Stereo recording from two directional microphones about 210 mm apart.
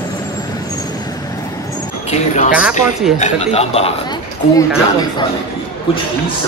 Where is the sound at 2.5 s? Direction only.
5° right (ahead or behind).